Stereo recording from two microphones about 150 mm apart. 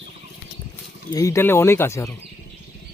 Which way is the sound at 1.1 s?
20° left (ahead or behind).